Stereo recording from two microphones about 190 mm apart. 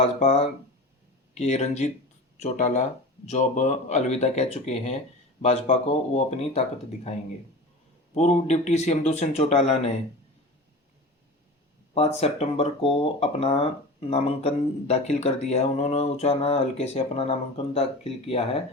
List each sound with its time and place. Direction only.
0.0 s speech: 35° left (ahead or behind)
8.1 s speech: 35° left (ahead or behind)
11.9 s speech: 35° left (ahead or behind)